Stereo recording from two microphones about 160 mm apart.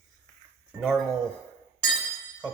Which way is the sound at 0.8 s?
Centre (ahead or behind).